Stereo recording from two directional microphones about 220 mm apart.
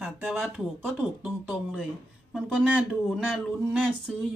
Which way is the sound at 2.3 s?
5° right (ahead or behind).